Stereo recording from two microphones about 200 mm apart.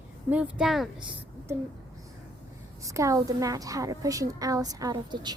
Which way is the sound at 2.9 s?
15° right (ahead or behind).